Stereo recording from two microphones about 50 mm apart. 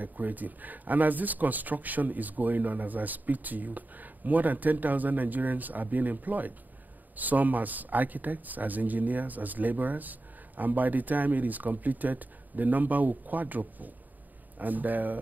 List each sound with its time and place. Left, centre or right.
0.0 s speech: right